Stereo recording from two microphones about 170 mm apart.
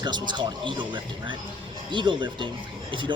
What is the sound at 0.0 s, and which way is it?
Speech, 25° right (ahead or behind).